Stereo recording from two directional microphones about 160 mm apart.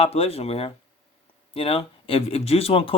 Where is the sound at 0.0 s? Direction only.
35° left (ahead or behind).